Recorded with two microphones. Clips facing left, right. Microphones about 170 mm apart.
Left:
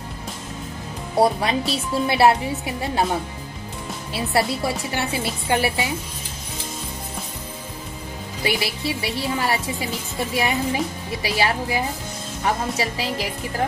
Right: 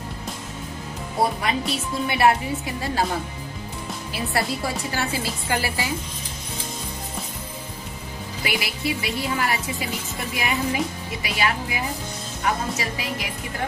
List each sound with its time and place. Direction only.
1.4 s a woman's voice: 30° left (ahead or behind)
4.1 s a woman's voice: 25° left (ahead or behind)
8.5 s a woman's voice: 30° left (ahead or behind)